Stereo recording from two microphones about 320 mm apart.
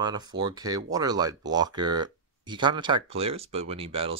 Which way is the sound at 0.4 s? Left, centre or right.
Centre.